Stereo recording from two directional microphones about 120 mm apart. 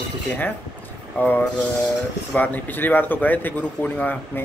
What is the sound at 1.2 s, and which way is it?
Speech, 15° left (ahead or behind).